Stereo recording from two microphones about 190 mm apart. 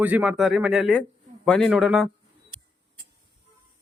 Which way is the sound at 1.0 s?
5° left (ahead or behind).